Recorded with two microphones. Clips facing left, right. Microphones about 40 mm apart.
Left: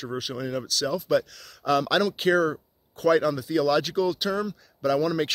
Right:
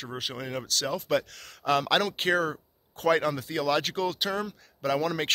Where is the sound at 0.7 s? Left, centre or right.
Right.